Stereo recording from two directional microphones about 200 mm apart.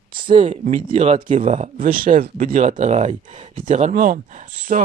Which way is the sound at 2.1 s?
30° right (ahead or behind).